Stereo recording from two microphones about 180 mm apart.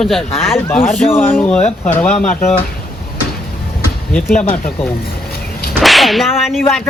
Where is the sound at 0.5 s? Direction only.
10° left (ahead or behind).